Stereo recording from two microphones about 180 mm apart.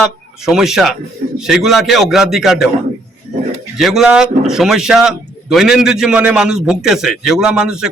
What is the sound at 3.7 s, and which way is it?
A man's voice, centre (ahead or behind).